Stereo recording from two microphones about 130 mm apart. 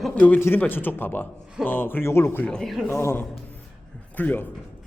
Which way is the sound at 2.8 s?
15° left (ahead or behind).